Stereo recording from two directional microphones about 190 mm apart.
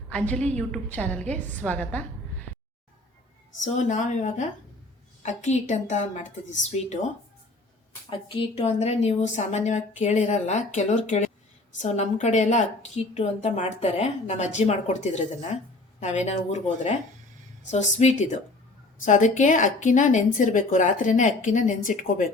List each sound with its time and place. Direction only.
0.1 s a woman's voice: 5° left (ahead or behind)
3.6 s a woman's voice: 40° left (ahead or behind)
8.3 s a woman's voice: 30° left (ahead or behind)